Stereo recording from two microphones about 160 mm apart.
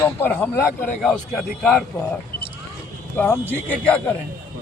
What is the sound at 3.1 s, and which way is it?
A man's voice, 10° left (ahead or behind).